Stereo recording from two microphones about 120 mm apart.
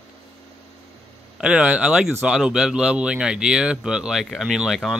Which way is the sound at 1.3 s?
10° right (ahead or behind).